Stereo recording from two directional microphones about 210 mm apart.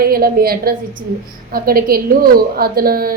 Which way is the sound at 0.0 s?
45° right (ahead or behind).